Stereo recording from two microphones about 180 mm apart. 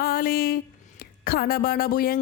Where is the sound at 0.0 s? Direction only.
55° left (ahead or behind).